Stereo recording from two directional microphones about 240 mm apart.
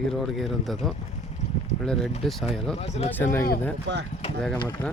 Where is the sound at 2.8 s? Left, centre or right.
Left.